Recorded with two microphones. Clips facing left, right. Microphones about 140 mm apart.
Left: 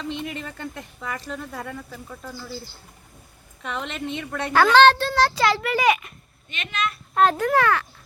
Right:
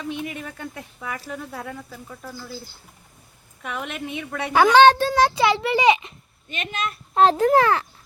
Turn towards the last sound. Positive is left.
turn(degrees=-30)  # may be behind; listen again after turning